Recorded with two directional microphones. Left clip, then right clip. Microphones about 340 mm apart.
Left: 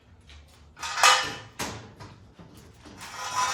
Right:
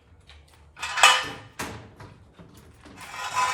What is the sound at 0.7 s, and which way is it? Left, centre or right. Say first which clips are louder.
Dishes: right 4 dB; right.